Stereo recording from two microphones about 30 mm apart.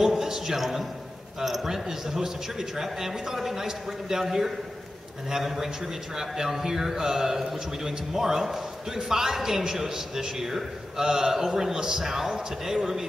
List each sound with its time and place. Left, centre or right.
0.0 s a man's voice: centre